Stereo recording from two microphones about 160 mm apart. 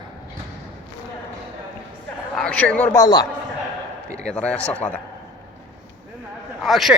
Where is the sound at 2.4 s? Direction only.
5° left (ahead or behind).